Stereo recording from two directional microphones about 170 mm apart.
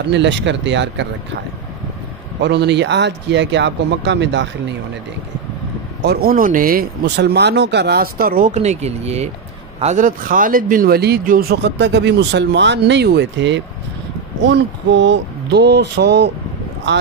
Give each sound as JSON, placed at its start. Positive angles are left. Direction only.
{"t": 0.0, "sound": "speech", "side_deg": -90}
{"t": 2.4, "sound": "speech", "side_deg": -85}
{"t": 6.0, "sound": "speech", "side_deg": -65}